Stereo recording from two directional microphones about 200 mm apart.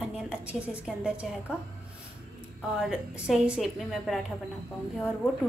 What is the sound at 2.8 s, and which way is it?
A woman's voice, 5° right (ahead or behind).